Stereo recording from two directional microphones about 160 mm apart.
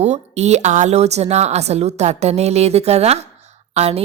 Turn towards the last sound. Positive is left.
turn(degrees=-40)  # may be behind; listen again after turning